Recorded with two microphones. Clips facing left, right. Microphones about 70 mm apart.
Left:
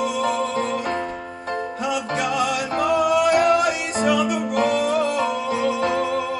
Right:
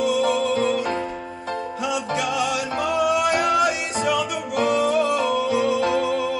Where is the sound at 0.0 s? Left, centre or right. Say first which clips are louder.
Right 2 dB; left.